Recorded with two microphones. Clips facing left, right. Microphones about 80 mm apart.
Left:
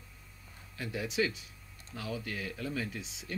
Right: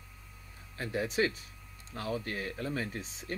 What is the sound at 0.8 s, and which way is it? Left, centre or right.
Speech, right.